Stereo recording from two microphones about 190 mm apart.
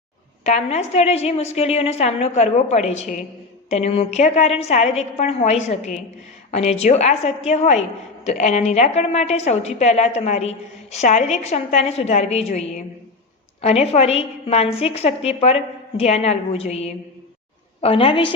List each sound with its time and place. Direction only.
0.4 s a woman's voice: 35° left (ahead or behind)